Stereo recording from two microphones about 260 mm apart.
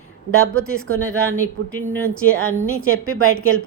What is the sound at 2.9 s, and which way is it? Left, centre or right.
Speech, right.